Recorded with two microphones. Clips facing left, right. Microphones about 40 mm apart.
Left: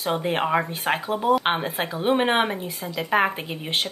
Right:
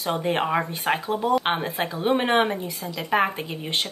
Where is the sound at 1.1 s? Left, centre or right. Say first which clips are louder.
Left 3 dB; centre.